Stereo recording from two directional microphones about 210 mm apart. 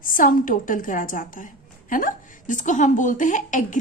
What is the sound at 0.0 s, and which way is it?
A woman's voice, 40° left (ahead or behind).